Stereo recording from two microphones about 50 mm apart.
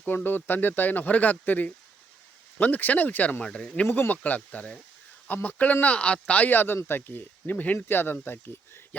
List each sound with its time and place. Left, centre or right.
0.0 s speech: left
3.4 s speech: centre
3.8 s speech: left
4.1 s speech: left
6.5 s speech: left
7.5 s speech: left
7.9 s speech: left